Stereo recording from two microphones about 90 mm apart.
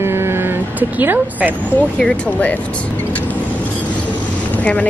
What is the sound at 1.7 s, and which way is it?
Speech, 15° left (ahead or behind).